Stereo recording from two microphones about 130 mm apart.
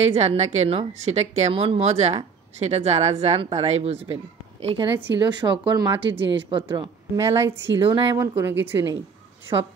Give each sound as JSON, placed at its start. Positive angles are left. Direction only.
{"t": 0.0, "sound": "a woman's voice", "side_deg": -55}
{"t": 1.5, "sound": "speech", "side_deg": -45}
{"t": 5.0, "sound": "speech", "side_deg": -35}
{"t": 6.8, "sound": "speech", "side_deg": -20}